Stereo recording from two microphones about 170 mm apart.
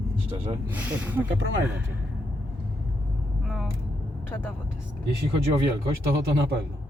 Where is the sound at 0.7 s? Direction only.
10° right (ahead or behind).